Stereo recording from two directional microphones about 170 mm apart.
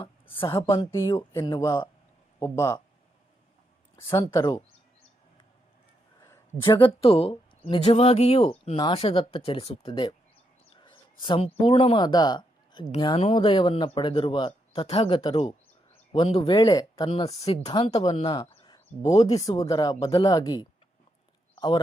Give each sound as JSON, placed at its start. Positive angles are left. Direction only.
{"t": 0.3, "sound": "speech", "side_deg": 30}
{"t": 0.7, "sound": "speech", "side_deg": 20}
{"t": 3.9, "sound": "speech", "side_deg": 15}
{"t": 6.6, "sound": "speech", "side_deg": 30}
{"t": 17.1, "sound": "speech", "side_deg": 30}
{"t": 18.4, "sound": "a sound", "side_deg": 35}
{"t": 19.2, "sound": "speech", "side_deg": 20}